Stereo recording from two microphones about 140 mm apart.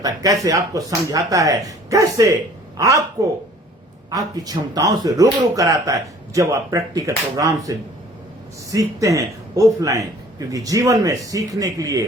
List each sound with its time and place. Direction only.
0.0 s speech: 25° right (ahead or behind)
4.1 s speech: 25° right (ahead or behind)